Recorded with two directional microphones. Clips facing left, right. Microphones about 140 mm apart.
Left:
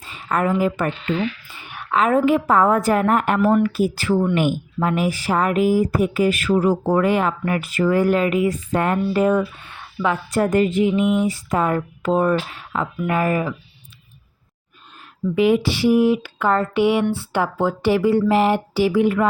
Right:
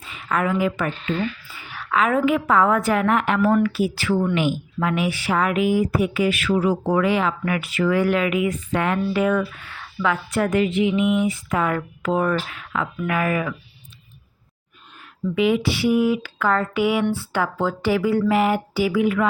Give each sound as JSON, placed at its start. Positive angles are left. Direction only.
{"t": 0.0, "sound": "a woman's voice", "side_deg": 35}
{"t": 1.6, "sound": "a sound", "side_deg": 20}
{"t": 2.0, "sound": "speech", "side_deg": 35}
{"t": 9.4, "sound": "speech", "side_deg": 20}
{"t": 10.2, "sound": "speech", "side_deg": 40}
{"t": 15.4, "sound": "speech", "side_deg": 40}